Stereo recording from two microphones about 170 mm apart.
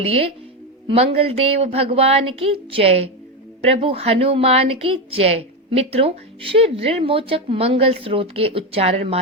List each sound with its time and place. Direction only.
0.0 s speech: 35° right (ahead or behind)